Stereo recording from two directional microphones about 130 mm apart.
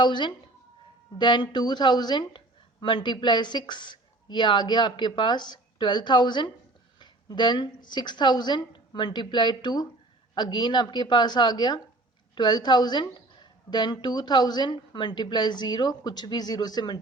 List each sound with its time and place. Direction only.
0.0 s a woman's voice: 35° left (ahead or behind)